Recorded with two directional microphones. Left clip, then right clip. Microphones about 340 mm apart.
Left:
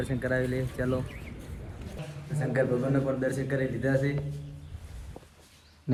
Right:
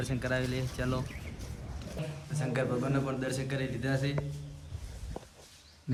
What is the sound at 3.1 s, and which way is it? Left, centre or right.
Speech, centre.